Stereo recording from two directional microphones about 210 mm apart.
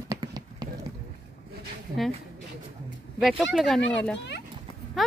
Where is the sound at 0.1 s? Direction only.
20° right (ahead or behind).